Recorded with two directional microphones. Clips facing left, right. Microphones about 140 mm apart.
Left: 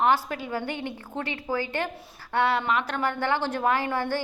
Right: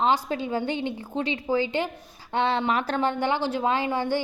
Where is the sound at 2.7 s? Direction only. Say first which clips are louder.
Right 1 dB; 35° right (ahead or behind).